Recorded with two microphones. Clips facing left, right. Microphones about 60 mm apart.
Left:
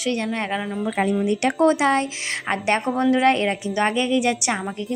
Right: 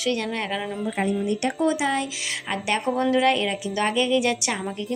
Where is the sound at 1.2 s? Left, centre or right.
Left.